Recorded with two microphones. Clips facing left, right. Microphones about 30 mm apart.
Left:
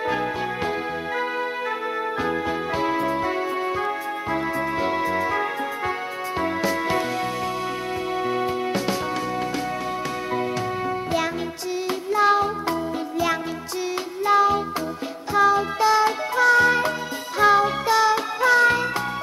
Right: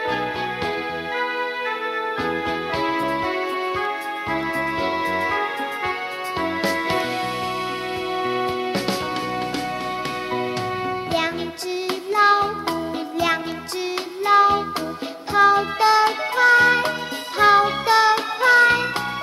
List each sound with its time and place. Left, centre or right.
2.7 s music: right
4.7 s music: right
12.1 s music: right
14.2 s music: right